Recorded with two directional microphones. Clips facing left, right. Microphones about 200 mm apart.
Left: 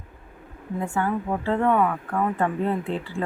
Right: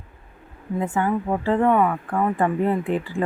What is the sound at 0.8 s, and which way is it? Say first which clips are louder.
Speech: right 3 dB; 20° right (ahead or behind).